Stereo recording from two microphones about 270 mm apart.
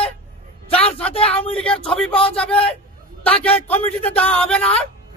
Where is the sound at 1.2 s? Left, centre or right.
Left.